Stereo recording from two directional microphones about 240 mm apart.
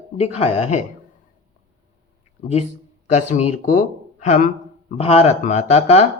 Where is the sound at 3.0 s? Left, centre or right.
Left.